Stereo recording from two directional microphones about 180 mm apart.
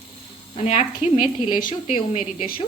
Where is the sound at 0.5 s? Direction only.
35° left (ahead or behind).